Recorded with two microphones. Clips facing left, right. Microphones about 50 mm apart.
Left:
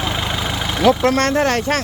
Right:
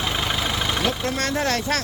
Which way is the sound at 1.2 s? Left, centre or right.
Left.